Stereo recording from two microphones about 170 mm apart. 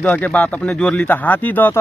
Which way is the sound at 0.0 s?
10° left (ahead or behind).